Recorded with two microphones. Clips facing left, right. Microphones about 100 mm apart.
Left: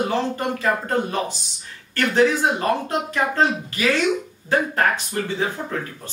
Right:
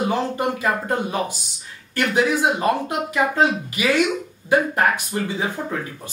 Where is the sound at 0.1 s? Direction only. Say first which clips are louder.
Right 1 dB; 10° right (ahead or behind).